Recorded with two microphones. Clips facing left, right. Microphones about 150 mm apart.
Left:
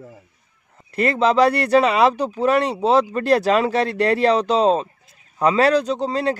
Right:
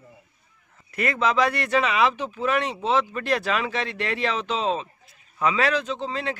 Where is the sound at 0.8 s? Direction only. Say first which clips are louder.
Left 6 dB; 30° left (ahead or behind).